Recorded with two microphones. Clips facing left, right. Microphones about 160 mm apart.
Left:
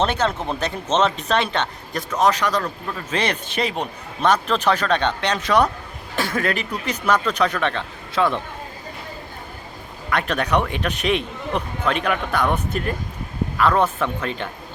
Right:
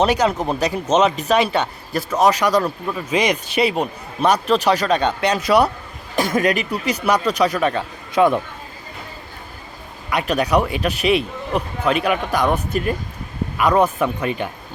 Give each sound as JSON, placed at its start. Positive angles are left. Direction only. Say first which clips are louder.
{"t": 0.0, "sound": "speech", "louder": "right 4 dB", "side_deg": -10}
{"t": 10.1, "sound": "speech", "louder": "right 3 dB", "side_deg": -10}